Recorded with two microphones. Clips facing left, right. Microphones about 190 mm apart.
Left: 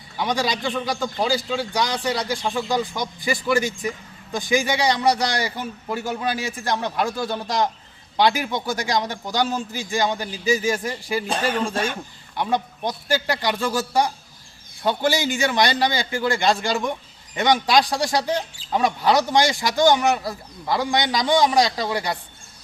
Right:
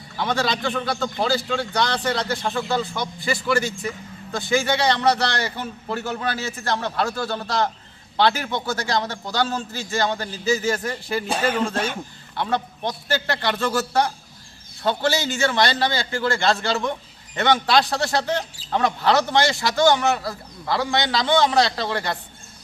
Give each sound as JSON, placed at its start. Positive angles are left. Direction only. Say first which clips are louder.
{"t": 0.2, "sound": "speech", "louder": "even", "side_deg": 15}